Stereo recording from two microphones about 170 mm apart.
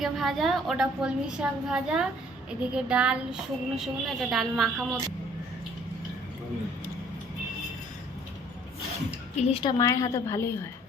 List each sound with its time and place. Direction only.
0.0 s a woman's voice: centre (ahead or behind)
9.4 s a woman's voice: 35° left (ahead or behind)
9.6 s a woman's voice: 20° left (ahead or behind)